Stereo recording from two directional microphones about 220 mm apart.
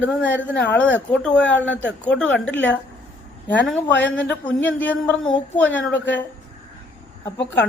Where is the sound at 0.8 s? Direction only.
5° left (ahead or behind).